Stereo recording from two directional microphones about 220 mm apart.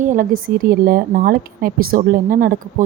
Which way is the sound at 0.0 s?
35° right (ahead or behind).